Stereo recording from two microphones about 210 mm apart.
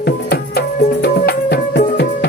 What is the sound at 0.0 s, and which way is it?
Music, 50° left (ahead or behind).